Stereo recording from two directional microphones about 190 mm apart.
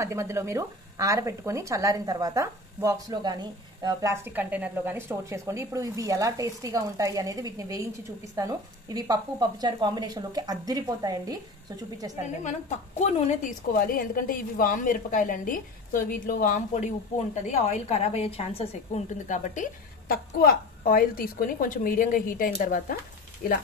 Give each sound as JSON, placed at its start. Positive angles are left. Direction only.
{"t": 0.0, "sound": "speech", "side_deg": -15}
{"t": 12.4, "sound": "a woman's voice", "side_deg": 35}